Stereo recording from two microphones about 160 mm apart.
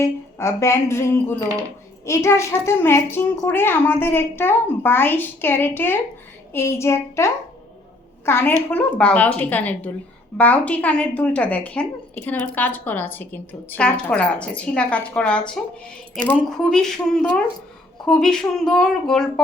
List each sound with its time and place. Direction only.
0.0 s a child's voice: 15° left (ahead or behind)
18.0 s speech: 5° left (ahead or behind)